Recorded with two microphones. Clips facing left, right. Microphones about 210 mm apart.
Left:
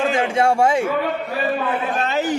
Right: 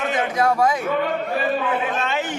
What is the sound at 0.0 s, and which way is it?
Speech, 30° left (ahead or behind).